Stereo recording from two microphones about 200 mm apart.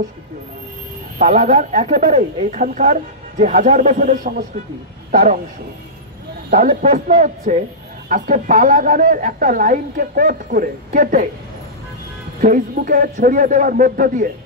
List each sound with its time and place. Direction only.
1.1 s speech: 40° right (ahead or behind)
6.5 s speech: 40° right (ahead or behind)
12.4 s speech: 40° right (ahead or behind)